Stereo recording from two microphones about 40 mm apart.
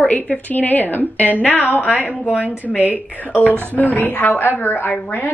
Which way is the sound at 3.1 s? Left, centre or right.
Left.